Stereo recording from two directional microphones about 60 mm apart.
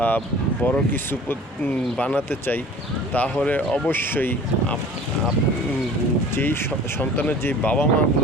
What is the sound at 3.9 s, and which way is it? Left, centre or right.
Speech, left.